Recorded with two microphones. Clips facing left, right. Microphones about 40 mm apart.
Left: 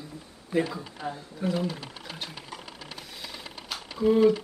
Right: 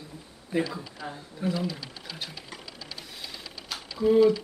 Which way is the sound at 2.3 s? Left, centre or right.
Left.